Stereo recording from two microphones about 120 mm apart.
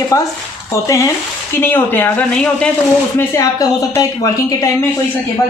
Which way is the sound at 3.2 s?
25° left (ahead or behind).